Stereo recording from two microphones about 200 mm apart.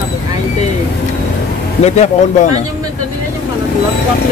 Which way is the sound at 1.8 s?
35° left (ahead or behind).